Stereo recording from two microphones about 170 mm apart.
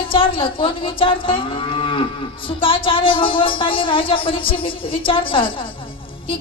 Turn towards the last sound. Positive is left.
turn(degrees=30)  # may be behind; listen again after turning